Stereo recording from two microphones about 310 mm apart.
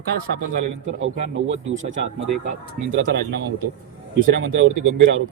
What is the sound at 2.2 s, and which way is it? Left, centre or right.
Speech, right.